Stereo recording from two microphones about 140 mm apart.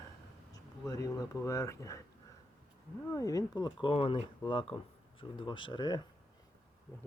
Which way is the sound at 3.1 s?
25° left (ahead or behind).